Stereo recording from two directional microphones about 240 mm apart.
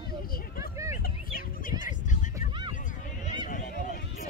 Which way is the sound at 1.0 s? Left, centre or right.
Left.